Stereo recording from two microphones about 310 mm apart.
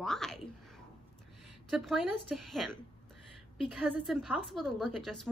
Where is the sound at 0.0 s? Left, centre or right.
Centre.